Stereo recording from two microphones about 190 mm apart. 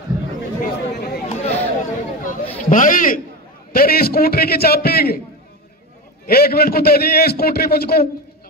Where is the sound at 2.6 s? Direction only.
45° left (ahead or behind).